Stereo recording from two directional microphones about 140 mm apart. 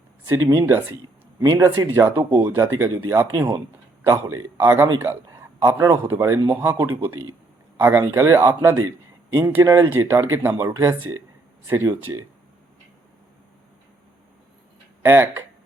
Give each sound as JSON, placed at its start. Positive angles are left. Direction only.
{"t": 0.3, "sound": "a man's voice", "side_deg": -20}
{"t": 15.0, "sound": "a man's voice", "side_deg": -15}